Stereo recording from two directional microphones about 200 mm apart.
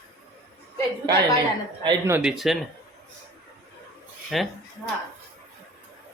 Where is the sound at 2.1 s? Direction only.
5° right (ahead or behind).